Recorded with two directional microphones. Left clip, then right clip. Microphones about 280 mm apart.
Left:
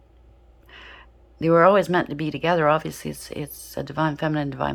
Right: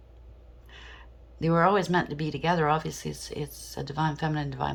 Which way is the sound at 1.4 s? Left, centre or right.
Centre.